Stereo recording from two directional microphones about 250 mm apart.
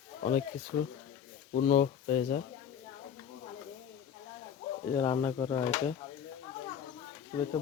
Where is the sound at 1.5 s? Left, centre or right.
Left.